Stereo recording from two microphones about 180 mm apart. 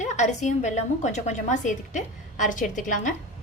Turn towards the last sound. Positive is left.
turn(degrees=45)  # may be behind; listen again after turning